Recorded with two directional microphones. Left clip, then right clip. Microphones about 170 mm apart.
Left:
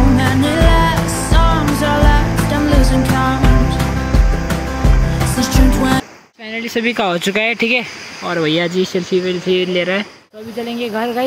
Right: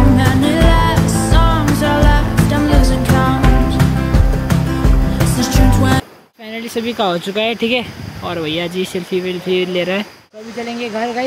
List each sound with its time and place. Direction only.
0.2 s music: centre (ahead or behind)
6.5 s a sound: centre (ahead or behind)
6.8 s speech: 15° left (ahead or behind)
9.8 s speech: 10° right (ahead or behind)
10.8 s speech: 25° left (ahead or behind)